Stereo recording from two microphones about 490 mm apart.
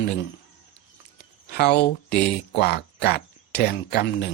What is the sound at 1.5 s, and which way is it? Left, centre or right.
Speech, centre.